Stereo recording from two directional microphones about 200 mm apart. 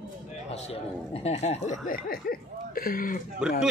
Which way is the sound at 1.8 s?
50° left (ahead or behind).